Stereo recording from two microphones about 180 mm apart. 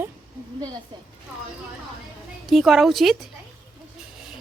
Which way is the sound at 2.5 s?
Centre (ahead or behind).